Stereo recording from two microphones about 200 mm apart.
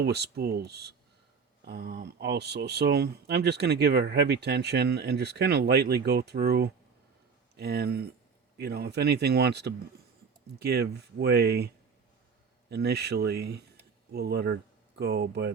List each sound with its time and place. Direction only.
0.0 s speech: 55° right (ahead or behind)
12.7 s speech: 55° right (ahead or behind)